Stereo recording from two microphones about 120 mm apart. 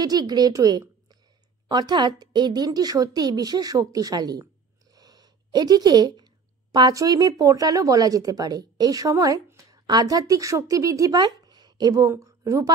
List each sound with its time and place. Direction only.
0.0 s a woman's voice: 35° right (ahead or behind)